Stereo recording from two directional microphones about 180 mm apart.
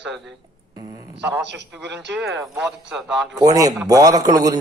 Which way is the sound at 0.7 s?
20° right (ahead or behind).